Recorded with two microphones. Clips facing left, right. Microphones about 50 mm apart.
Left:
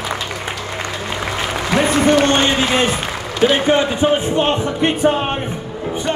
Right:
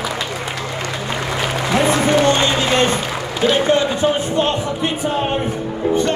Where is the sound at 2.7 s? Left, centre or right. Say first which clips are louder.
Right 1 dB; centre.